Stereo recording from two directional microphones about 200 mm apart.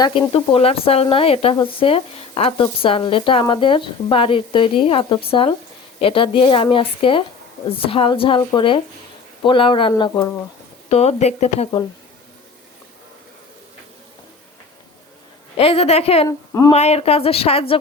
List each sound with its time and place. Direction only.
0.0 s speech: 25° left (ahead or behind)
10.8 s speech: 35° left (ahead or behind)
15.5 s speech: 30° left (ahead or behind)
16.5 s speech: 20° left (ahead or behind)
16.7 s speech: 30° left (ahead or behind)